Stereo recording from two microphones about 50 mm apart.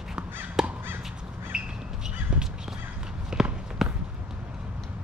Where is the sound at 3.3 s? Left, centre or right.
Centre.